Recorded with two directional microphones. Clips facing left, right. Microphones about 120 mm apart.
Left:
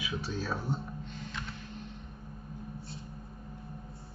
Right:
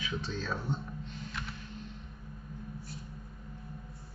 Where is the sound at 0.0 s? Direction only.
10° left (ahead or behind).